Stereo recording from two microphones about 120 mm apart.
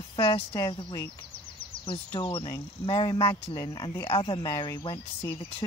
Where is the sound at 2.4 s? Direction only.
35° left (ahead or behind).